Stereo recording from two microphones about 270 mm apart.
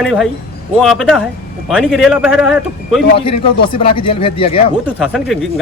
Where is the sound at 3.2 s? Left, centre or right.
Centre.